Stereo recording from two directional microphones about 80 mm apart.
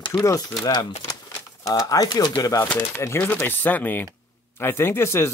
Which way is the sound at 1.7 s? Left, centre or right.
Left.